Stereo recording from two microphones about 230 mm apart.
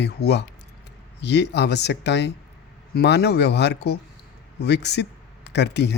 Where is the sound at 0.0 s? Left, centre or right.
Left.